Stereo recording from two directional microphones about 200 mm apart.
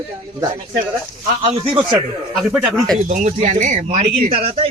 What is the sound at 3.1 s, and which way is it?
A man's voice, 40° right (ahead or behind).